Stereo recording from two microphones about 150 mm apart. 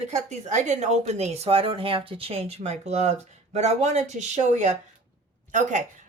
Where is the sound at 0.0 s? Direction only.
50° right (ahead or behind).